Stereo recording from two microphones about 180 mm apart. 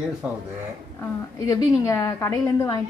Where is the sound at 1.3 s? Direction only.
20° left (ahead or behind).